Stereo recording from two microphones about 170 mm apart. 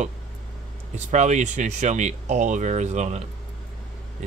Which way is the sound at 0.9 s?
45° right (ahead or behind).